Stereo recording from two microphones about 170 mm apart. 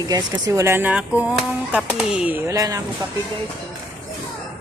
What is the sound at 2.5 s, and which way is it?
Speech, 20° right (ahead or behind).